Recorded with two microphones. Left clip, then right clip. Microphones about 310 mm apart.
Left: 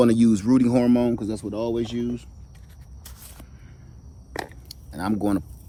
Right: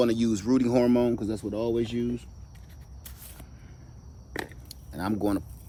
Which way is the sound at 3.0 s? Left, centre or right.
Centre.